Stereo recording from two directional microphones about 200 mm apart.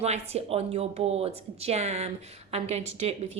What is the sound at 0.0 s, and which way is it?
A woman's voice, 30° right (ahead or behind).